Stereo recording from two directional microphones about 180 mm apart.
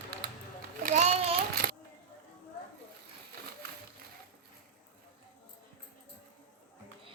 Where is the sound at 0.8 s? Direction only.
40° right (ahead or behind).